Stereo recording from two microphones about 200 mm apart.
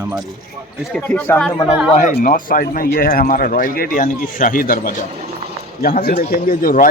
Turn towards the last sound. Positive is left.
turn(degrees=45)  # may be behind; listen again after turning